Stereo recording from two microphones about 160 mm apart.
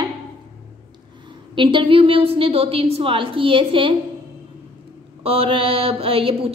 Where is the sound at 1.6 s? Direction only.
30° right (ahead or behind).